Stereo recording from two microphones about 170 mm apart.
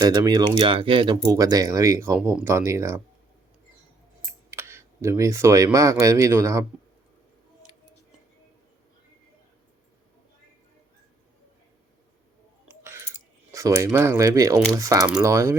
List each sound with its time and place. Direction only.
0.0 s speech: 25° right (ahead or behind)
4.5 s speech: 15° right (ahead or behind)
12.6 s a sound: 15° right (ahead or behind)
14.7 s speech: 20° right (ahead or behind)